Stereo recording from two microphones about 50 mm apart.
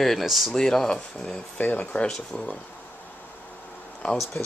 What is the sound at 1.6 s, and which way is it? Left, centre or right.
Speech, left.